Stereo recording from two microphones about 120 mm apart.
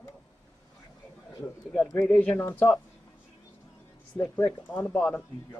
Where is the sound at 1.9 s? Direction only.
5° left (ahead or behind).